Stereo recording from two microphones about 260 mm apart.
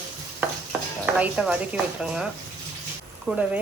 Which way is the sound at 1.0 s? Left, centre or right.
Centre.